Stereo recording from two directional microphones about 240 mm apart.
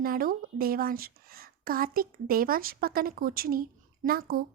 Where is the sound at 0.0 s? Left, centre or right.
Right.